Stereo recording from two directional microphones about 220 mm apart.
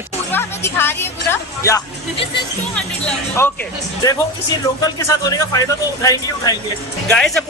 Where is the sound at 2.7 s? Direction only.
5° left (ahead or behind).